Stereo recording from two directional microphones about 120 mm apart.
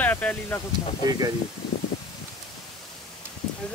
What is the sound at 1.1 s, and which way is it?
Speech, 30° right (ahead or behind).